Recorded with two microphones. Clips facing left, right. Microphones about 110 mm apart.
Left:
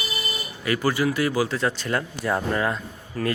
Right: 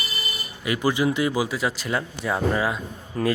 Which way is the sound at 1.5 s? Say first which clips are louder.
Left 1 dB; 5° right (ahead or behind).